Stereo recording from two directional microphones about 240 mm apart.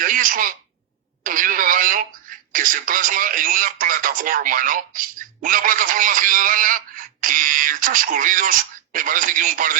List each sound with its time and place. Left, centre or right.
0.0 s a woman's voice: right